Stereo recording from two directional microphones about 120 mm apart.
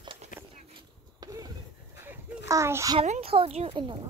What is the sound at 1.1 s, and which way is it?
Basketball bounce, 30° right (ahead or behind).